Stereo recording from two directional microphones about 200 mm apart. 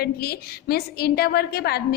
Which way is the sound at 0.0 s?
50° left (ahead or behind).